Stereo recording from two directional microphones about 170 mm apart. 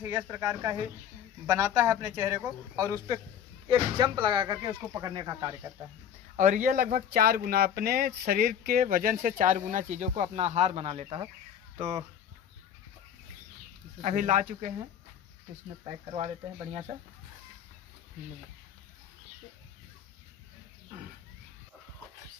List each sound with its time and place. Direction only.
0.0 s a man's voice: 10° right (ahead or behind)
3.6 s speech: 25° right (ahead or behind)
6.3 s speech: 50° right (ahead or behind)
14.0 s speech: 45° right (ahead or behind)